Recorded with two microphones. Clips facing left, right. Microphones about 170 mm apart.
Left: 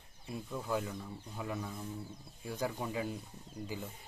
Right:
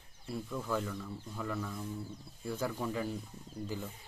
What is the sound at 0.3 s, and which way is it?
Speech, 15° left (ahead or behind).